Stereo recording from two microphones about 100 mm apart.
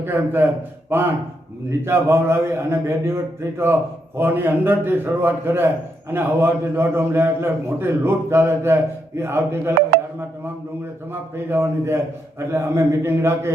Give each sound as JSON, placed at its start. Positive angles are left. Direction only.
{"t": 0.0, "sound": "a man's voice", "side_deg": -20}
{"t": 11.1, "sound": "a man's voice", "side_deg": -25}